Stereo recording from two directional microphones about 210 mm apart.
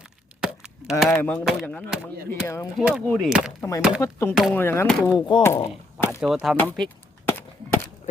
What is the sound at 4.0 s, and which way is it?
Speech, 15° left (ahead or behind).